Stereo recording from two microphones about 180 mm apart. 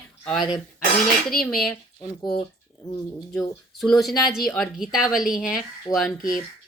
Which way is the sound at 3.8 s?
Centre (ahead or behind).